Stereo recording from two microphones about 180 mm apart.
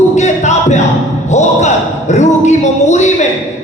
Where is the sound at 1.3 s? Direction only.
40° left (ahead or behind).